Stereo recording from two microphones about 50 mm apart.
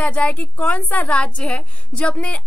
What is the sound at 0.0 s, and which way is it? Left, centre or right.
A woman's voice, left.